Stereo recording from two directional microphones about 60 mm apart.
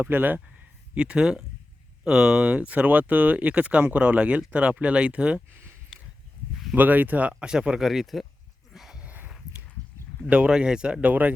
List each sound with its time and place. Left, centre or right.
0.0 s speech: right
0.9 s speech: centre
5.9 s a sound: centre
6.7 s speech: right; by 7.9 s centre
7.9 s speech: centre
8.7 s a sound: centre
10.2 s speech: centre
11.1 s speech: right